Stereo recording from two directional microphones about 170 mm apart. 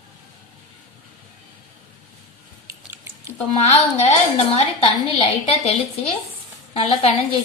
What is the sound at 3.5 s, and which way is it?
A woman's voice, 40° left (ahead or behind).